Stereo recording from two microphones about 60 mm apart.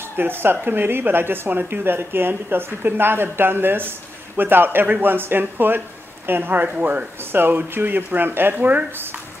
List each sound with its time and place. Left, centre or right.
0.0 s speech: right